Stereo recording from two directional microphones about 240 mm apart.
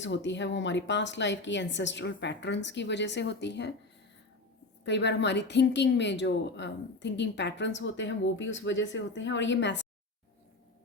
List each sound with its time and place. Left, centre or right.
0.0 s a woman's voice: left
4.9 s a woman's voice: left